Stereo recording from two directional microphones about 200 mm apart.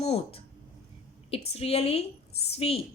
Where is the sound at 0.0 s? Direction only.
30° left (ahead or behind).